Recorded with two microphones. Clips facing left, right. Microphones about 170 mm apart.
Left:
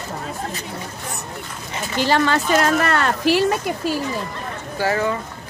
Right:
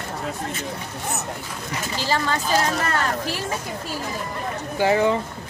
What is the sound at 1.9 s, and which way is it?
A woman's voice, 65° left (ahead or behind).